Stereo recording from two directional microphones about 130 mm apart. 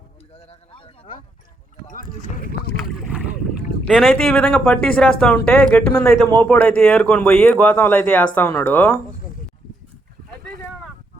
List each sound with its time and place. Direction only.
0.3 s a sound: 50° left (ahead or behind)
2.9 s boat: centre (ahead or behind)
3.8 s speech: 5° left (ahead or behind)